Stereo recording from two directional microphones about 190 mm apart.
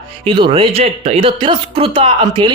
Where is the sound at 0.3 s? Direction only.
25° right (ahead or behind).